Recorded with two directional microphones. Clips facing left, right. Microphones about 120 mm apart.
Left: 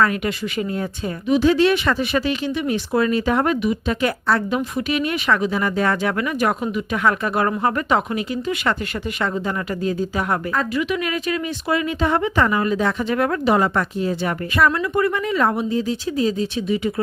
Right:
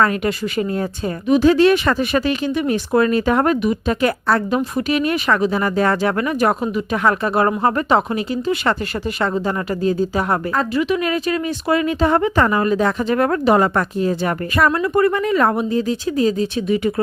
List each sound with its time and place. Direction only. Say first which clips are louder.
0.0 s a woman's voice: right 2 dB; 40° right (ahead or behind)